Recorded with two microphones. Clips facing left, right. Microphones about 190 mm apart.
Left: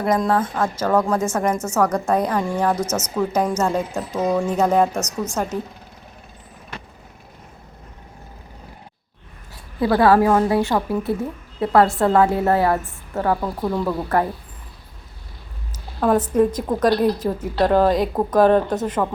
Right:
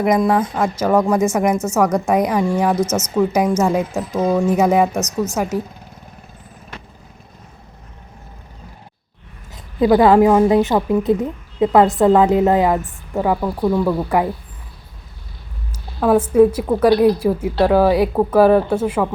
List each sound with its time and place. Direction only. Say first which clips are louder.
0.2 s a woman's voice: right 3 dB; 15° right (ahead or behind)
9.8 s a woman's voice: right 4 dB; 20° right (ahead or behind)
15.7 s a woman's voice: right 3 dB; 5° right (ahead or behind)